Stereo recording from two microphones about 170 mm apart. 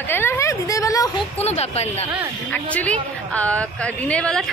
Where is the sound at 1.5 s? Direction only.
40° left (ahead or behind).